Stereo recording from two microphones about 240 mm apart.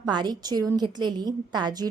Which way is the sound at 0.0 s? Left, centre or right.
Centre.